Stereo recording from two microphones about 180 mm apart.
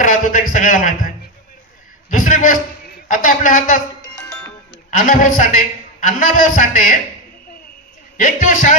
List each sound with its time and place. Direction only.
0.0 s a sound: 45° left (ahead or behind)
2.0 s a man's voice: 45° left (ahead or behind)
4.9 s a man's voice: 45° left (ahead or behind)
8.2 s a man's voice: 45° left (ahead or behind)